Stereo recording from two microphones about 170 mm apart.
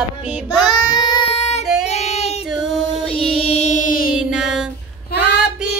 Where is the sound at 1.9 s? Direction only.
40° left (ahead or behind).